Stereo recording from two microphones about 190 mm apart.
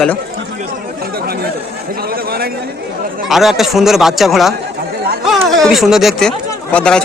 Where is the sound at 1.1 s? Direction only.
55° right (ahead or behind).